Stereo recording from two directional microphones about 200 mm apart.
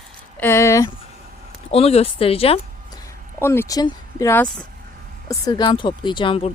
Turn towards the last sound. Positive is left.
turn(degrees=25)  # may be behind; listen again after turning